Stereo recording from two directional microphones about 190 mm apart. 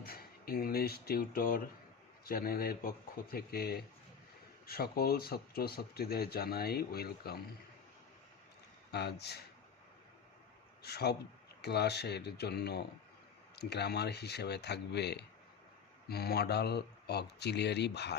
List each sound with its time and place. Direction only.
0.0 s speech: 50° left (ahead or behind)
8.9 s speech: 60° left (ahead or behind)
10.8 s speech: 60° left (ahead or behind)